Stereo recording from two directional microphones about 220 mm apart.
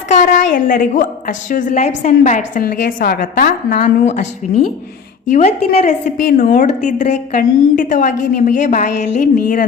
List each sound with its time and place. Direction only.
0.1 s a woman's voice: 35° left (ahead or behind)